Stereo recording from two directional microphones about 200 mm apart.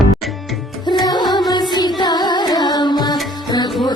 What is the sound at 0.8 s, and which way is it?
Music, 20° left (ahead or behind).